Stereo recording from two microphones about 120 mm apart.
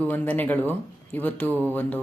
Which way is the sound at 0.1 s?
15° left (ahead or behind).